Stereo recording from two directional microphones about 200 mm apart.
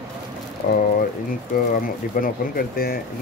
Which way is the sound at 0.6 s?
40° left (ahead or behind).